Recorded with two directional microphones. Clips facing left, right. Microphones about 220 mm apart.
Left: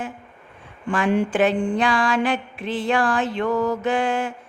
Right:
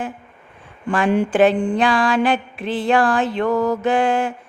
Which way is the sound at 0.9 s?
35° right (ahead or behind).